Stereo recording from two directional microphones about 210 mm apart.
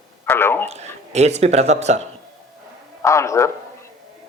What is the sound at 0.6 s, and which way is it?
Speech, 30° right (ahead or behind).